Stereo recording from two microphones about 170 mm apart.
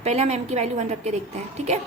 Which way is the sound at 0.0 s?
40° right (ahead or behind).